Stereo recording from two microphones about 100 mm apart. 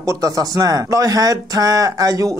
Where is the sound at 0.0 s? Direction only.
35° right (ahead or behind).